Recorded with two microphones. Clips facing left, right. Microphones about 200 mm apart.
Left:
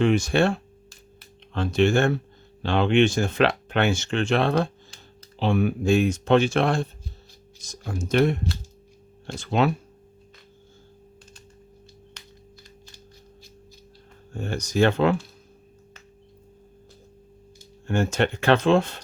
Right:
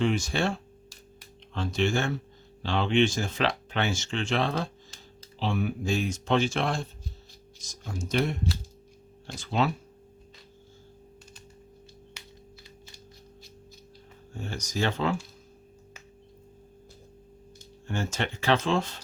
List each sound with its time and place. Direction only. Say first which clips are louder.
0.0 s speech: left 6 dB; 60° left (ahead or behind)
12.2 s music: even; 10° right (ahead or behind)
14.3 s speech: left 9 dB; 60° left (ahead or behind)
17.8 s speech: left 8 dB; 60° left (ahead or behind)